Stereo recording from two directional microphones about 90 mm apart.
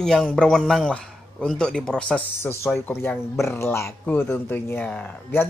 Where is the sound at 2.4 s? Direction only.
30° left (ahead or behind).